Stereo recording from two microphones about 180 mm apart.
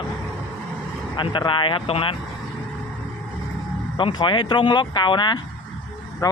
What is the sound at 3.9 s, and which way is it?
Speech, 25° left (ahead or behind).